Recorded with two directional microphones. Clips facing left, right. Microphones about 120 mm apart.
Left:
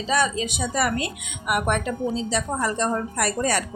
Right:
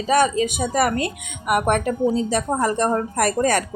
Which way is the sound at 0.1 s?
50° right (ahead or behind).